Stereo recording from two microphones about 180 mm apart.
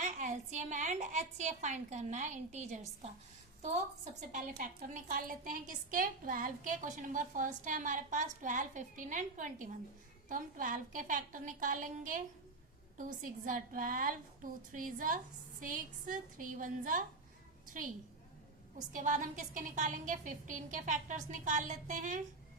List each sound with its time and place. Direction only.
0.0 s a woman's voice: 40° right (ahead or behind)
4.3 s a woman's voice: 45° right (ahead or behind)
18.9 s a woman's voice: 45° right (ahead or behind)